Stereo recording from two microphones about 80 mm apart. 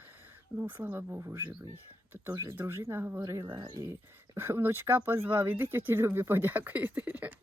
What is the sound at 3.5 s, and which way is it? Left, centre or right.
Speech, right.